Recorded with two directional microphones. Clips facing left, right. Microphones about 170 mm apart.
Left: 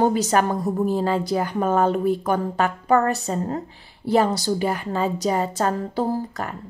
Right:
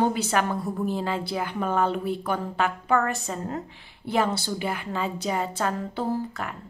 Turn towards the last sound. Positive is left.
turn(degrees=40)  # may be behind; listen again after turning